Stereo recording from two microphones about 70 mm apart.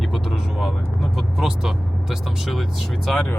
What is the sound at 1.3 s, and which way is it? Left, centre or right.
Speech, centre.